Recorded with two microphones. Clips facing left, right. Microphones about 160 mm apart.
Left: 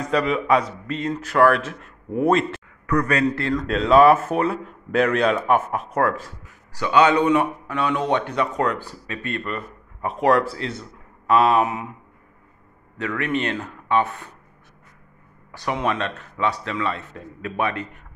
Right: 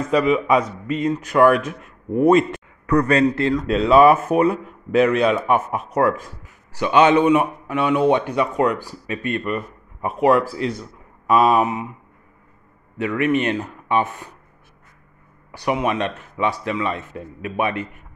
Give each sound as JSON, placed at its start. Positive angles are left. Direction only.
{"t": 0.0, "sound": "a man's voice", "side_deg": -5}
{"t": 2.9, "sound": "a man's voice", "side_deg": -30}
{"t": 3.5, "sound": "a man's voice", "side_deg": -5}
{"t": 6.7, "sound": "a man's voice", "side_deg": -20}
{"t": 10.1, "sound": "speech", "side_deg": 0}
{"t": 10.6, "sound": "a man's voice", "side_deg": -15}
{"t": 12.9, "sound": "a man's voice", "side_deg": -15}
{"t": 15.5, "sound": "a man's voice", "side_deg": -15}